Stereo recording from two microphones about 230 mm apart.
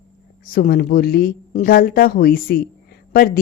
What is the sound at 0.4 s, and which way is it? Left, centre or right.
Speech, left.